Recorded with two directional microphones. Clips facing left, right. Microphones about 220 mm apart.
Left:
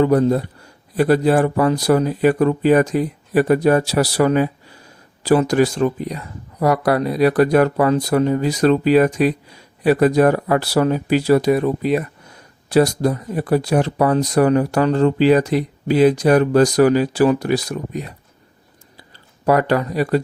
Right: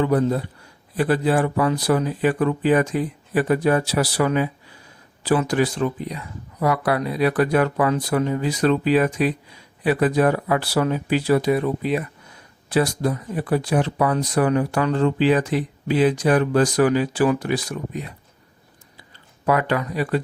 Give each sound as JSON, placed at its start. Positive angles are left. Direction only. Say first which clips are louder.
{"t": 0.0, "sound": "speech", "louder": "left 5 dB", "side_deg": 40}
{"t": 19.5, "sound": "speech", "louder": "left 5 dB", "side_deg": 40}